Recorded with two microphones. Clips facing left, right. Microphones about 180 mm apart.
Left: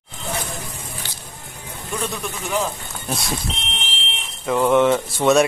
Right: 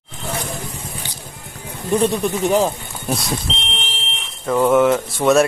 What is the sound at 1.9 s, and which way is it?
Speech, 30° right (ahead or behind).